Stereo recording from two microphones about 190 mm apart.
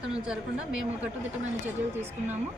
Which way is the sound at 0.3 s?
5° right (ahead or behind).